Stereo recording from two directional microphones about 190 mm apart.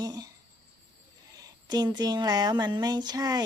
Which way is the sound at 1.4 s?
20° right (ahead or behind).